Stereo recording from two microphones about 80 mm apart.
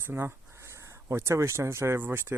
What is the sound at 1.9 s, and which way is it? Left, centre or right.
Speech, right.